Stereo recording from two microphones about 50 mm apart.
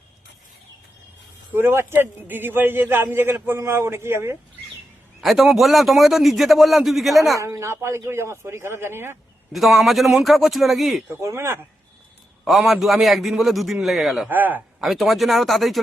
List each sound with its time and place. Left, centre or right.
1.5 s a man's voice: right
5.2 s a man's voice: centre
7.3 s a man's voice: right
9.5 s a man's voice: centre
11.2 s speech: right
12.5 s a man's voice: centre
14.3 s speech: right
14.8 s a man's voice: centre